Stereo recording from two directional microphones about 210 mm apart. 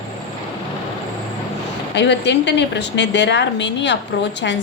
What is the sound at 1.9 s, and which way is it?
A woman's voice, 55° left (ahead or behind).